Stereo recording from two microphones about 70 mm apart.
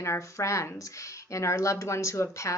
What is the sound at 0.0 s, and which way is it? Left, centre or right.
Speech, left.